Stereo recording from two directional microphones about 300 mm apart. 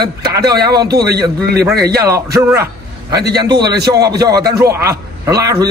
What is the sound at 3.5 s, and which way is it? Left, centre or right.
Speech, right.